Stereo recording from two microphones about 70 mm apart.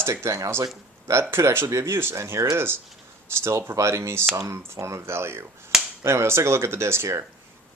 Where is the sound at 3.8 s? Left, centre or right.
Right.